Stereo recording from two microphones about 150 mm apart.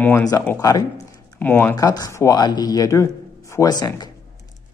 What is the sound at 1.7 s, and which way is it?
Speech, 25° left (ahead or behind).